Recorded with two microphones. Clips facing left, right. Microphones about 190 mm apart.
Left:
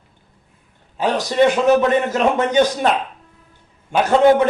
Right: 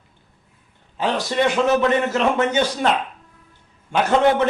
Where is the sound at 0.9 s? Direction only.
15° left (ahead or behind).